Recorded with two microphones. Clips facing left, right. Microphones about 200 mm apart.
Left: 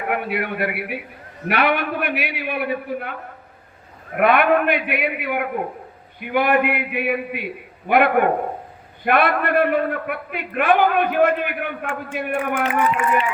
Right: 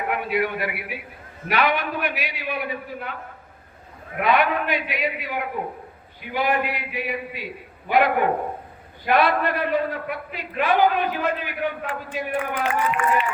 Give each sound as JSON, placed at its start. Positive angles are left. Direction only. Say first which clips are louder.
{"t": 0.1, "sound": "a man's voice", "louder": "left 1 dB", "side_deg": 55}
{"t": 4.2, "sound": "a man's voice", "louder": "left 5 dB", "side_deg": 55}